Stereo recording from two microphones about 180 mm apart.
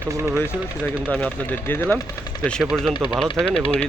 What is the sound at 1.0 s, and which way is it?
A man's voice, 5° left (ahead or behind).